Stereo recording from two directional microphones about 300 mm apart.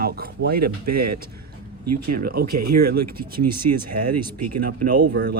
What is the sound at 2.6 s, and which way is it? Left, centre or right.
Speech, right.